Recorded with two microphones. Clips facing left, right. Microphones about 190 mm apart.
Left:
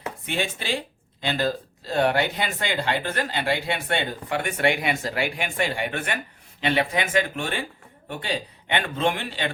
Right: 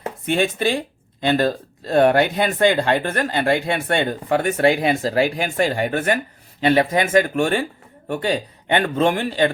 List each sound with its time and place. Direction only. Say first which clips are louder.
0.3 s speech: right 9 dB; 50° right (ahead or behind)